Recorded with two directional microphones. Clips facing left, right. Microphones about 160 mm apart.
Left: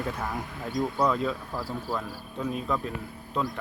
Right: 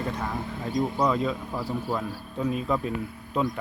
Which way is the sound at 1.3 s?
15° right (ahead or behind).